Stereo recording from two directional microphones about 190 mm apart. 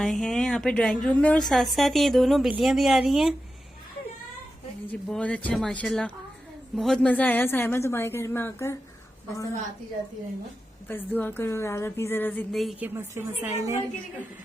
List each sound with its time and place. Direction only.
0.0 s a woman's voice: centre (ahead or behind)
4.9 s a woman's voice: 5° left (ahead or behind)
10.8 s a woman's voice: 10° left (ahead or behind)
12.9 s a woman's voice: 10° right (ahead or behind)